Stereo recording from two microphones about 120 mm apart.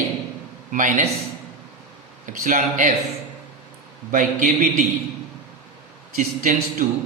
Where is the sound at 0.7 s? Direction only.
90° right.